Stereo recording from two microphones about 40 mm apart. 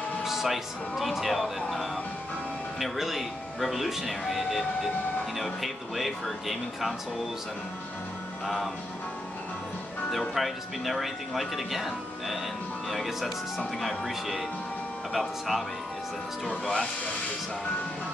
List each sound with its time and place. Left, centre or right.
0.2 s speech: centre
2.8 s speech: centre
10.3 s speech: centre
16.4 s speech: centre